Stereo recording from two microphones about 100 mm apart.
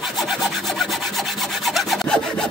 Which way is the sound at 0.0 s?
Centre (ahead or behind).